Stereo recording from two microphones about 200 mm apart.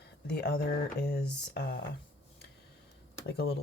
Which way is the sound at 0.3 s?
50° left (ahead or behind).